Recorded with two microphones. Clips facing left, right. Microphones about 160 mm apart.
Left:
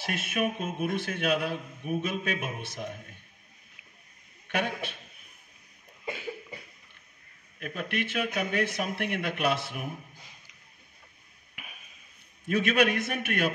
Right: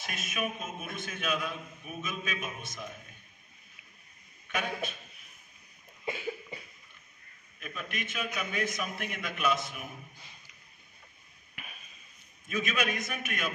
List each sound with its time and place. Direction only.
0.0 s a man's voice: 65° left (ahead or behind)
4.5 s a man's voice: 65° left (ahead or behind)
7.6 s a man's voice: 65° left (ahead or behind)
11.5 s a sound: 10° left (ahead or behind)
12.4 s a man's voice: 65° left (ahead or behind)